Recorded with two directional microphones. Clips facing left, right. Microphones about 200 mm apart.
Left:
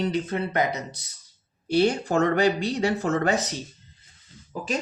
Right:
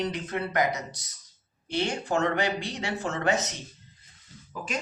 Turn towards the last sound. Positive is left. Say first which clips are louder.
# left 4 dB
turn(degrees=30)  # may be behind; listen again after turning